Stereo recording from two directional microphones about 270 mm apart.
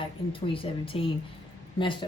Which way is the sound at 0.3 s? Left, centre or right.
Centre.